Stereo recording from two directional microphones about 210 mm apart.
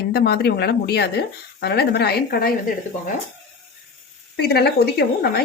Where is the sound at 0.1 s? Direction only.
50° left (ahead or behind).